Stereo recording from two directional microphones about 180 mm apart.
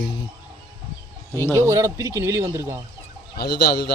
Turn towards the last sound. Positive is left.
turn(degrees=60)  # may be behind; listen again after turning